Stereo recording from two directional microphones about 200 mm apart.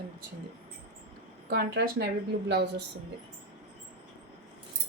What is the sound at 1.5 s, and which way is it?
Speech, 55° right (ahead or behind).